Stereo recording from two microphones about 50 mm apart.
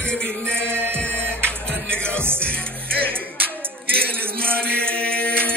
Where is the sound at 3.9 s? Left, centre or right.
Right.